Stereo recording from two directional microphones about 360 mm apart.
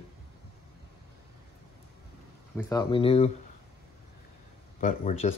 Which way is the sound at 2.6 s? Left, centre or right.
Centre.